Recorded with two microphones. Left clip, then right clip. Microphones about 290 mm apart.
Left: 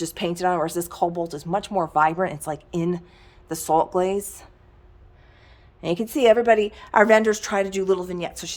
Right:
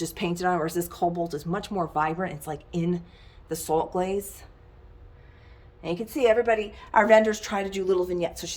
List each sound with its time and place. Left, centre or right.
0.0 s speech: centre
5.8 s speech: left; by 8.5 s centre